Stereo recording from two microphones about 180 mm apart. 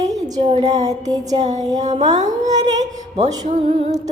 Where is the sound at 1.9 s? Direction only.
40° right (ahead or behind).